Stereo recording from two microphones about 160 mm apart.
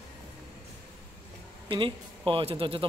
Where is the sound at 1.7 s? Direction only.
30° right (ahead or behind).